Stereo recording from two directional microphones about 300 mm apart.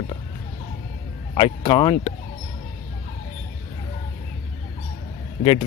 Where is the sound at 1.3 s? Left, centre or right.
Centre.